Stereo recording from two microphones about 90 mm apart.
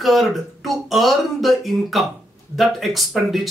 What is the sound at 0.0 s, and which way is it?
Speech, centre (ahead or behind).